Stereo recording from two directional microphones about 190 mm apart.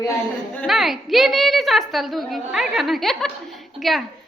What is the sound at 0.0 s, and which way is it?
A woman's voice, 10° left (ahead or behind).